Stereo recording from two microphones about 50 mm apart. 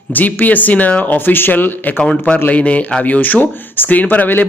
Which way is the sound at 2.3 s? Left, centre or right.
Left.